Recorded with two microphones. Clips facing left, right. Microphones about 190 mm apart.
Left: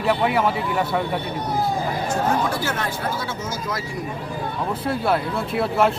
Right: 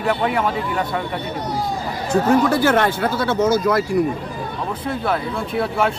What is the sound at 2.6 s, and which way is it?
Speech, 70° right (ahead or behind).